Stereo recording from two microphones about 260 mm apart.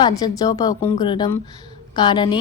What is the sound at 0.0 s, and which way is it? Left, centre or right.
A woman's voice, centre.